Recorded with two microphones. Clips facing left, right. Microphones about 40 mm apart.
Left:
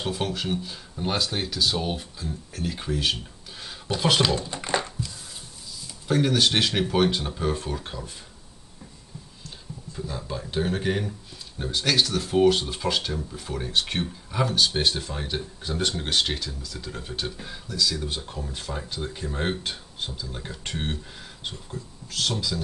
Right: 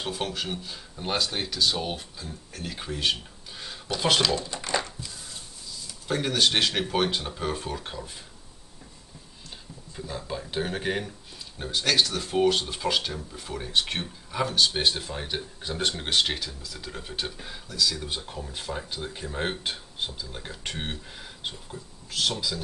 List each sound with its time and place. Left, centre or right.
0.0 s speech: centre
4.4 s a sound: left
6.0 s speech: centre
9.9 s speech: centre